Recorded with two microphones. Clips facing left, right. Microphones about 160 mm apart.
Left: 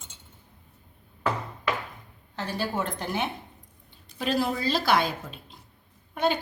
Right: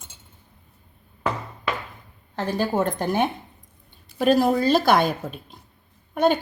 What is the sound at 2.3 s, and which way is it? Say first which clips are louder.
A woman's voice: right 7 dB; 45° right (ahead or behind).